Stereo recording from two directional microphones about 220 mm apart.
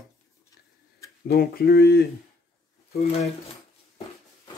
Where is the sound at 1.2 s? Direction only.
45° left (ahead or behind).